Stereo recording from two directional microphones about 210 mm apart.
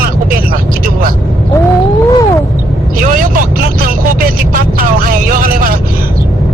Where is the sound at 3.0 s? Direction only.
40° right (ahead or behind).